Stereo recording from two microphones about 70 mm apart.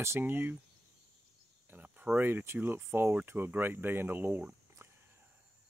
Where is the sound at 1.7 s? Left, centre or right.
Right.